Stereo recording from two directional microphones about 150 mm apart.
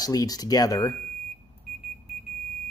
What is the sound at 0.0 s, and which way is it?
Speech, 25° left (ahead or behind).